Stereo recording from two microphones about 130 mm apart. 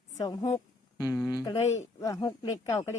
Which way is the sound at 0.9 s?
25° left (ahead or behind).